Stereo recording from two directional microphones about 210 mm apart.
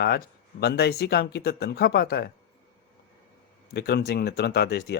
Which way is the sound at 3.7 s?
50° left (ahead or behind).